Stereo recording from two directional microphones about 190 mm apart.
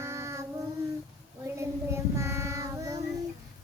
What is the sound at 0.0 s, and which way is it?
Child singing, 15° right (ahead or behind).